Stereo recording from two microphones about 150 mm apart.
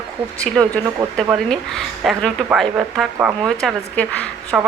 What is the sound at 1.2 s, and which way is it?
Speech, 5° left (ahead or behind).